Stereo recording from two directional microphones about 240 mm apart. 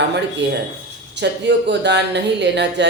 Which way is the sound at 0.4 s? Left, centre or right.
Right.